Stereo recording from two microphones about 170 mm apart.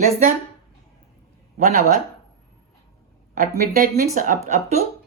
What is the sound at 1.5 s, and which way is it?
Speech, 45° right (ahead or behind).